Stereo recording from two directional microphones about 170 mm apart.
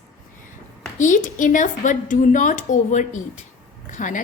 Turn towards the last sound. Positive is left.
turn(degrees=50)  # may be behind; listen again after turning